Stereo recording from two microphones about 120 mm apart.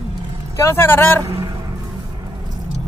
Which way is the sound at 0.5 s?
20° left (ahead or behind).